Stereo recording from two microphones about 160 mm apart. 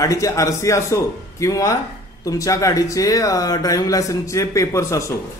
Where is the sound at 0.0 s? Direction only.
20° left (ahead or behind).